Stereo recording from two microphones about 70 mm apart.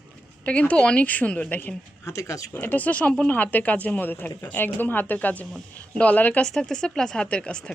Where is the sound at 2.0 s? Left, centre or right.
Left.